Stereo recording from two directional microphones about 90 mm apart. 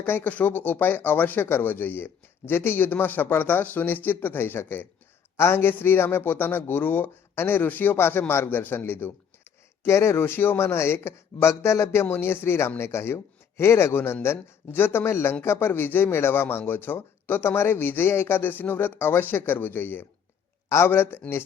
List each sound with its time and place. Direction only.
0.0 s speech: 20° left (ahead or behind)